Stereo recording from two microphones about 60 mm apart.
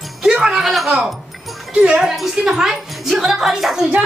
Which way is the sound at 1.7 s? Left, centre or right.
Centre.